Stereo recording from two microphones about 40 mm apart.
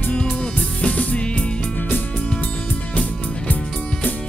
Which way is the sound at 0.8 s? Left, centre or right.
Left.